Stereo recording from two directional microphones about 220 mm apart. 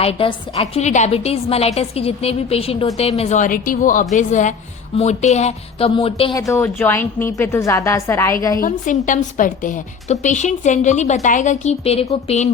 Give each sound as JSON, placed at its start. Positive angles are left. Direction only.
{"t": 0.0, "sound": "a woman's voice", "side_deg": 25}
{"t": 6.5, "sound": "a woman's voice", "side_deg": 10}
{"t": 8.6, "sound": "a woman's voice", "side_deg": 35}